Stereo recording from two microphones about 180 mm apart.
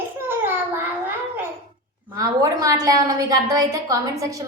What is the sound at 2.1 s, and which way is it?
A woman's voice, 20° right (ahead or behind).